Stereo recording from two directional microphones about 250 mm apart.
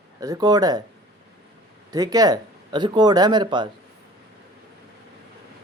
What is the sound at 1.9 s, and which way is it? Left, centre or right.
Speech, centre.